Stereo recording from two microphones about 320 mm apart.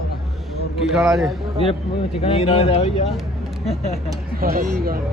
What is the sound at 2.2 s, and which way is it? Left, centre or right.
Speech, centre.